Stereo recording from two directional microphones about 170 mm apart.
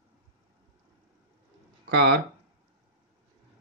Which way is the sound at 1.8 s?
70° right (ahead or behind).